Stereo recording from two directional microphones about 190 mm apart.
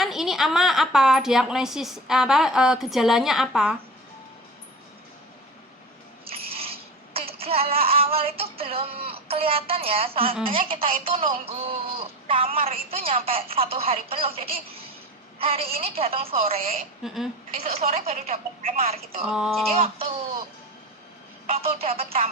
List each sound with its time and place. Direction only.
0.0 s a woman's voice: centre (ahead or behind)
6.3 s a sound: 30° right (ahead or behind)
10.7 s speech: 30° right (ahead or behind)
17.0 s a woman's voice: centre (ahead or behind)
17.5 s speech: 35° right (ahead or behind)
19.3 s a woman's voice: centre (ahead or behind)
19.7 s speech: 30° right (ahead or behind)
21.4 s speech: 30° right (ahead or behind)